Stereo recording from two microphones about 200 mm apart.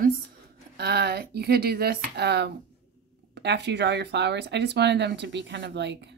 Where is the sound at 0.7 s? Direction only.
55° right (ahead or behind).